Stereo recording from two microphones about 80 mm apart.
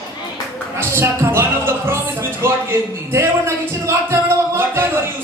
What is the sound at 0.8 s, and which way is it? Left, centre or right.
Music, right.